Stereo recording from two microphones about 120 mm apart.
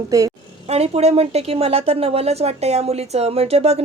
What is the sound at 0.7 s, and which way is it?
Speech, 60° right (ahead or behind).